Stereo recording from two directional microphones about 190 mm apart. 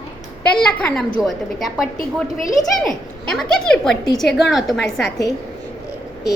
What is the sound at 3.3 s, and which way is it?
A woman's voice, centre (ahead or behind).